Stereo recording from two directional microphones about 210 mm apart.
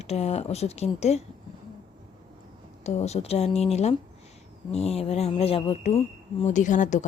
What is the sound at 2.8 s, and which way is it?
Speech, 30° left (ahead or behind).